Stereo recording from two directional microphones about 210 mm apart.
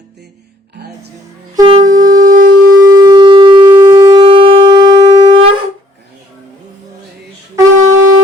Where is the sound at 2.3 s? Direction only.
40° right (ahead or behind).